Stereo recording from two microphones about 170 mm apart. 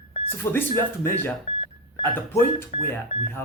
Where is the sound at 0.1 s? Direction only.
35° left (ahead or behind).